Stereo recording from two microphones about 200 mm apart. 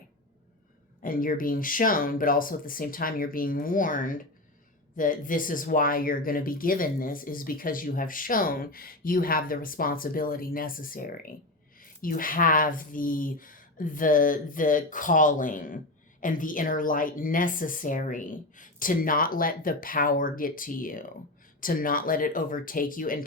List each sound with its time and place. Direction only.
1.0 s speech: 45° left (ahead or behind)